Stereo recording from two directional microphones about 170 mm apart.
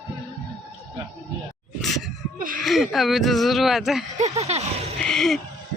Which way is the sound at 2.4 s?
55° right (ahead or behind).